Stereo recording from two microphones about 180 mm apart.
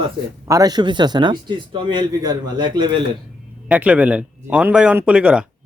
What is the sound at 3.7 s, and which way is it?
Speech, 10° right (ahead or behind).